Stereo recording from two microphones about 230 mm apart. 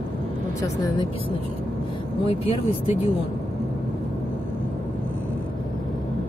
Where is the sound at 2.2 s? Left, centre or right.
Left.